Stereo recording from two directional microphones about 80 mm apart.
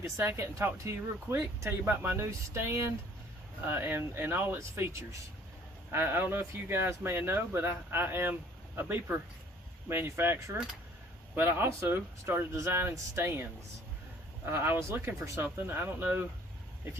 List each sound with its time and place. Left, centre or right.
0.2 s speech: right